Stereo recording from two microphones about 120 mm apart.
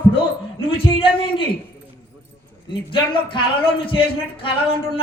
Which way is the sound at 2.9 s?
45° left (ahead or behind).